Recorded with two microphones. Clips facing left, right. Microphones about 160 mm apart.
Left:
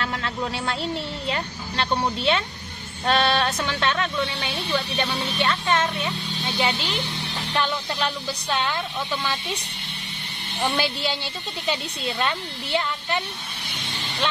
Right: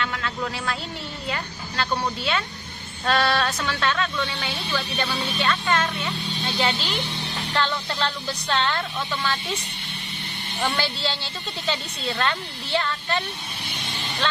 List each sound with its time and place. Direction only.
0.0 s a man's voice: 30° left (ahead or behind); by 9.4 s 15° left (ahead or behind)
10.6 s speech: 15° left (ahead or behind)